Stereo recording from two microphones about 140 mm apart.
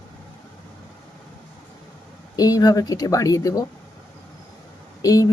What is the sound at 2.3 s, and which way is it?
Speech, 30° left (ahead or behind).